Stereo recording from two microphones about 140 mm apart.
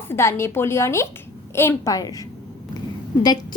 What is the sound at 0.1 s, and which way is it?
A woman's voice, 20° left (ahead or behind).